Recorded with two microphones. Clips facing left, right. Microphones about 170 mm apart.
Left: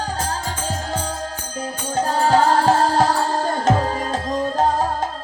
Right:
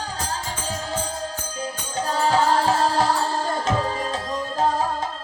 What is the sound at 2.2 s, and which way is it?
Music, 50° left (ahead or behind).